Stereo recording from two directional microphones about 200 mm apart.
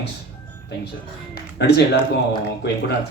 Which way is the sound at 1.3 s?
55° left (ahead or behind).